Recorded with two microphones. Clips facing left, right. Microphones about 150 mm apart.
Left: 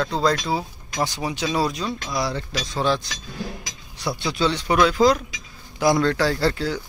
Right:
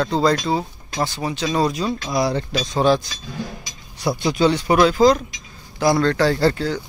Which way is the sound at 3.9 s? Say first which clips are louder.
Right 5 dB; 10° right (ahead or behind).